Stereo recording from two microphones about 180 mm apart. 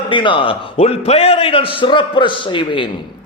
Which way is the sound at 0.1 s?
25° left (ahead or behind).